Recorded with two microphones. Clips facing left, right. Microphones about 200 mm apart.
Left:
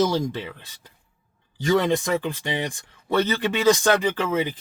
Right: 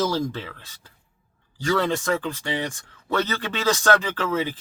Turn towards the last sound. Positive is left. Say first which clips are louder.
# left 2 dB
turn(degrees=15)  # may be behind; listen again after turning